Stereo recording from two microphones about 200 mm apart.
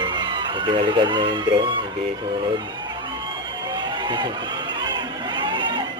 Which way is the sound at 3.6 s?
20° right (ahead or behind).